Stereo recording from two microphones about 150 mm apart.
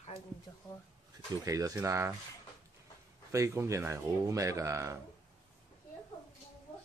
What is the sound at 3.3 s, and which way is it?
Speech, 20° right (ahead or behind).